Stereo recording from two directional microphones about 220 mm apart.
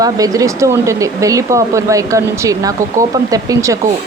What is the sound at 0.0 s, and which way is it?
Speech, 15° right (ahead or behind).